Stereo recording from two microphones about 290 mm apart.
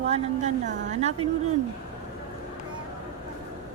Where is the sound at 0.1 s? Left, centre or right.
Right.